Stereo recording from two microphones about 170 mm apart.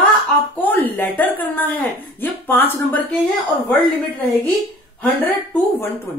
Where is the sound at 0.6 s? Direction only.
10° left (ahead or behind).